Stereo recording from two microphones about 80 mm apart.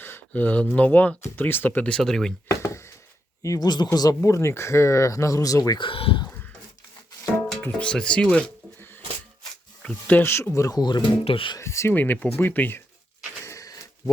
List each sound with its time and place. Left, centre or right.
0.0 s a sound: left
0.8 s speech: centre
2.5 s a sound: left
3.4 s speech: left
5.8 s speech: left
7.6 s speech: centre
8.8 s a sound: left
9.8 s speech: centre
10.2 s speech: left
11.6 s speech: left
11.9 s speech: left
13.4 s a sound: left